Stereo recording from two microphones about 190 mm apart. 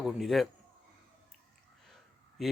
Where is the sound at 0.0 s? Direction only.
Centre (ahead or behind).